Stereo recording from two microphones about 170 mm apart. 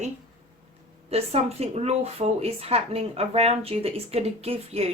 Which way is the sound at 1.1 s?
35° right (ahead or behind).